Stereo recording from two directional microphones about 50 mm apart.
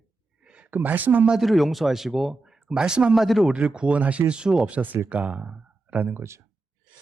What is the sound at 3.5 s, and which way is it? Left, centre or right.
Speech, right.